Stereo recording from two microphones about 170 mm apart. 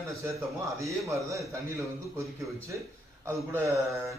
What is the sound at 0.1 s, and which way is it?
Speech, 15° right (ahead or behind).